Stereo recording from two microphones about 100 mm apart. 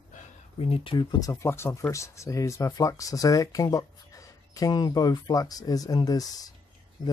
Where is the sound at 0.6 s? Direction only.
80° left.